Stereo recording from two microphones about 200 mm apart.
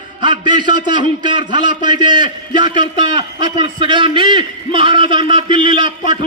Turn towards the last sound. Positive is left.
turn(degrees=-25)  # may be behind; listen again after turning